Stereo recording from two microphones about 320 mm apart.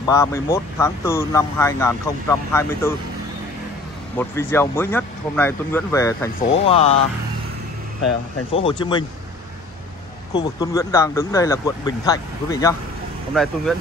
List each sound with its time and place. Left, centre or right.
0.0 s speech: centre
4.2 s speech: centre
6.4 s speech: left
8.6 s speech: centre
10.3 s speech: centre